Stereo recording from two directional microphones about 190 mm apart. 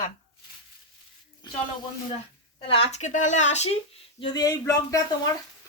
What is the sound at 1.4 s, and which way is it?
Speech, 25° left (ahead or behind).